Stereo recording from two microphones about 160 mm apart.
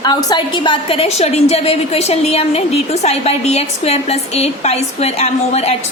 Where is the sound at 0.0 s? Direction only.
25° left (ahead or behind).